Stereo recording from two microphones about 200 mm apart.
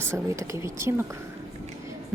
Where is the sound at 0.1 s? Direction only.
15° right (ahead or behind).